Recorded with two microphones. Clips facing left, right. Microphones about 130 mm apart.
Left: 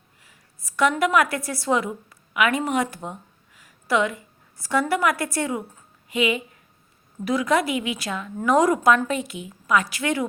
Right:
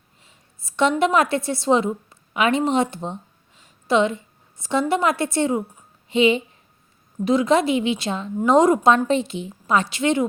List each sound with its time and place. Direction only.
0.2 s a woman's voice: 25° right (ahead or behind)